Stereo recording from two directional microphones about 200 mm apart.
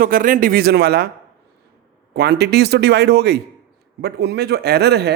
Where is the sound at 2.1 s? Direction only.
55° right (ahead or behind).